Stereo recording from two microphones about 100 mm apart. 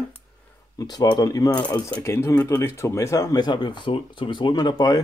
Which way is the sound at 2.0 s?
25° left (ahead or behind).